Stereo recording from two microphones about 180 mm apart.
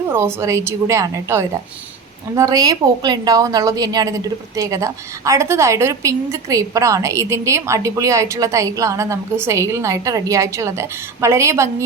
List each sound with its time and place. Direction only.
0.1 s a woman's voice: 15° right (ahead or behind)